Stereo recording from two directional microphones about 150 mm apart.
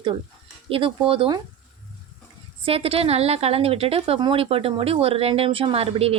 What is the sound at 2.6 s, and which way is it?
Sizzle, 40° right (ahead or behind).